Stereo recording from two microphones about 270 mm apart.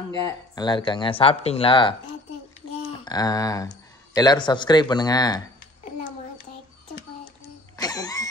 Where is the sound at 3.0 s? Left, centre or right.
Centre.